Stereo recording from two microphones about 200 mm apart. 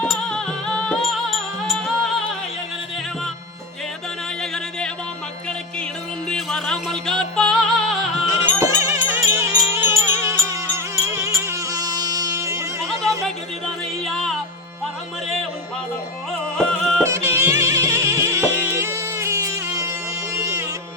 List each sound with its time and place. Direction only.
0.0 s music: 5° left (ahead or behind)
6.2 s music: 5° left (ahead or behind)
8.3 s music: 15° right (ahead or behind)
14.0 s music: centre (ahead or behind)
16.6 s music: centre (ahead or behind)
17.0 s music: 10° right (ahead or behind)